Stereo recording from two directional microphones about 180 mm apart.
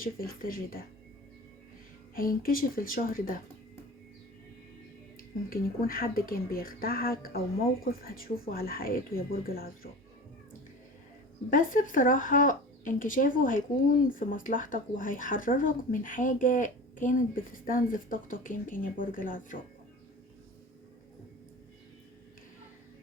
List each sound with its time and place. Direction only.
0.0 s speech: 55° left (ahead or behind)
2.1 s speech: 55° left (ahead or behind)
5.1 s speech: 50° left (ahead or behind)
11.5 s speech: 45° left (ahead or behind)